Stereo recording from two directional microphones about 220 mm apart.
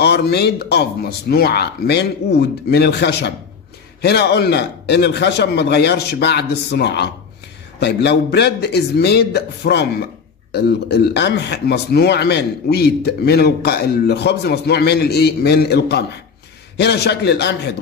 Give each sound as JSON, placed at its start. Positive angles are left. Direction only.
{"t": 0.0, "sound": "a man's voice", "side_deg": 50}